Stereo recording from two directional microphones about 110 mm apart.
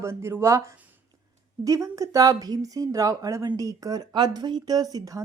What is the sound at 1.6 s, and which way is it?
Speech, 30° right (ahead or behind).